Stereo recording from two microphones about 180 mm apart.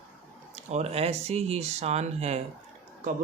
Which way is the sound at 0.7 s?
35° right (ahead or behind).